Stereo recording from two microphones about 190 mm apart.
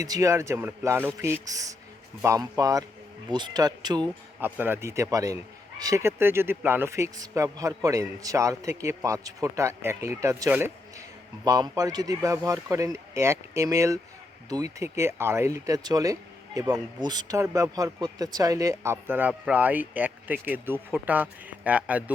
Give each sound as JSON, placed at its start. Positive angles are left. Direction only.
{"t": 0.0, "sound": "speech", "side_deg": -15}
{"t": 4.4, "sound": "speech", "side_deg": -10}